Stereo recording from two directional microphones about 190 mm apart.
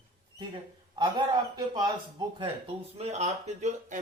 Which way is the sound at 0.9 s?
25° right (ahead or behind).